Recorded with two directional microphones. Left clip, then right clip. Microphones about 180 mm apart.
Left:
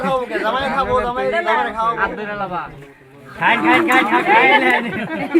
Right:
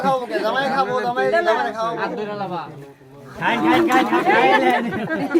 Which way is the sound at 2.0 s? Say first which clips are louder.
Left 4 dB; 50° right (ahead or behind).